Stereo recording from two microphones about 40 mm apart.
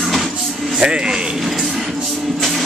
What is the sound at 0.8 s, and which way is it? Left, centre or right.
Speech, centre.